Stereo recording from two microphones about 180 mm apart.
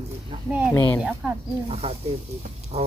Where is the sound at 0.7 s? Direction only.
10° left (ahead or behind).